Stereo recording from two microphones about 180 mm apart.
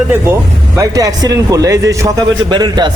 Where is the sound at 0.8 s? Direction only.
20° right (ahead or behind).